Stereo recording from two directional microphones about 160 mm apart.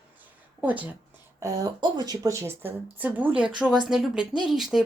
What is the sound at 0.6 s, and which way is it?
Speech, 10° right (ahead or behind).